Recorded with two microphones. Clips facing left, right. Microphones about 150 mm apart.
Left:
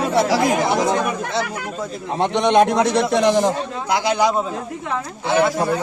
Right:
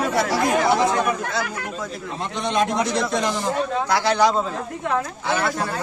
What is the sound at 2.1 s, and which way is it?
A man's voice, 70° left (ahead or behind).